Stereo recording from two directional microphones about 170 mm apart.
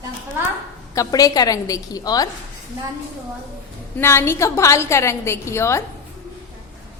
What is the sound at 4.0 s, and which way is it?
A woman's voice, 15° left (ahead or behind).